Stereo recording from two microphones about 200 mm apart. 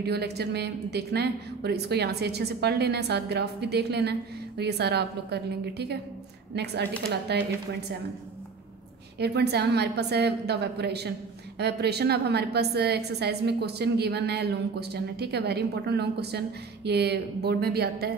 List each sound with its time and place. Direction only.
0.0 s a woman's voice: 55° right (ahead or behind)
9.2 s a woman's voice: 55° right (ahead or behind)